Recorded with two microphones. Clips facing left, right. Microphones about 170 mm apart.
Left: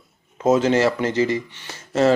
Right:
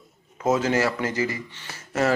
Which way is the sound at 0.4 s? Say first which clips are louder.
Left 5 dB; 25° left (ahead or behind).